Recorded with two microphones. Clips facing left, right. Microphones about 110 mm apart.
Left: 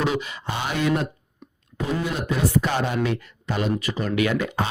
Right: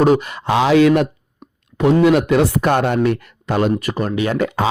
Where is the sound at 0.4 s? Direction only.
90° right.